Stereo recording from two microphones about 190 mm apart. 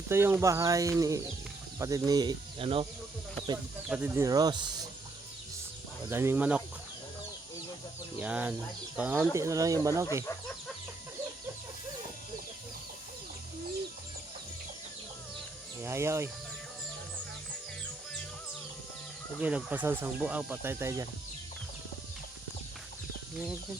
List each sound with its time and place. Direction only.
0.1 s speech: 10° right (ahead or behind); by 2.8 s 30° right (ahead or behind)
3.8 s speech: 5° right (ahead or behind)
6.1 s speech: 10° right (ahead or behind)
8.2 s speech: 5° right (ahead or behind)
15.8 s speech: 15° right (ahead or behind)
19.4 s speech: 5° right (ahead or behind)